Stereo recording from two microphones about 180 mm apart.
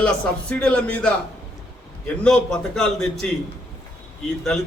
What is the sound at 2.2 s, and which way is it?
A man's voice, 5° left (ahead or behind).